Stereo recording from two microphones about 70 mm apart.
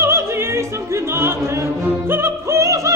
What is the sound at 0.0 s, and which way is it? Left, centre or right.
Opera, right.